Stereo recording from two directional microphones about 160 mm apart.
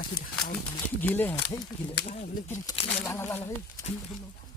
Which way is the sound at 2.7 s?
40° left (ahead or behind).